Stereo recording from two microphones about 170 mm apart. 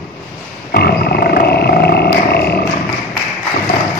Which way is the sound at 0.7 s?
70° left (ahead or behind).